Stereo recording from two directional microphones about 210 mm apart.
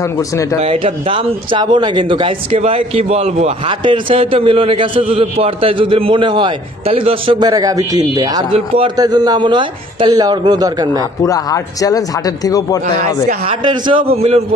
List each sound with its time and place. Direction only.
0.6 s a man's voice: 30° right (ahead or behind)
11.0 s speech: 15° left (ahead or behind)
13.7 s a man's voice: 25° right (ahead or behind)